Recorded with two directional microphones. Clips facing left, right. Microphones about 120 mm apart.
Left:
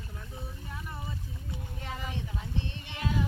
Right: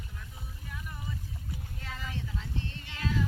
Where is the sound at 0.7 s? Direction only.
35° left (ahead or behind).